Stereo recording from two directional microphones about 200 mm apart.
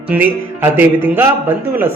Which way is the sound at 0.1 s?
10° right (ahead or behind).